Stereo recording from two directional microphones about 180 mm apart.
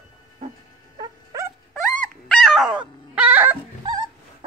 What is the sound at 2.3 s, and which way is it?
Dog, centre (ahead or behind).